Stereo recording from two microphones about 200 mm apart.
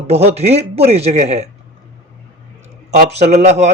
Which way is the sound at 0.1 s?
30° right (ahead or behind).